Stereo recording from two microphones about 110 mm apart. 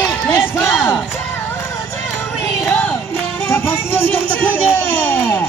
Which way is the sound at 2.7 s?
10° left (ahead or behind).